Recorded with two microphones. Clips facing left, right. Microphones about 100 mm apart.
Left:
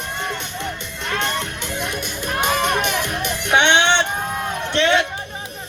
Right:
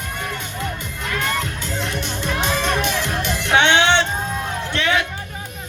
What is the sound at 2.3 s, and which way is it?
Music, 55° left (ahead or behind).